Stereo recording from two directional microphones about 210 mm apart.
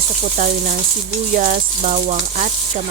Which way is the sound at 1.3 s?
35° right (ahead or behind).